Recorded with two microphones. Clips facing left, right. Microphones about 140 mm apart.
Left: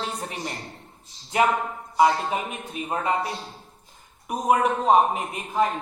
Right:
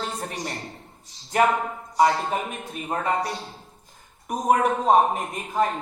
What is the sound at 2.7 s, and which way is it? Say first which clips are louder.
Speech: left 1 dB; 45° right (ahead or behind).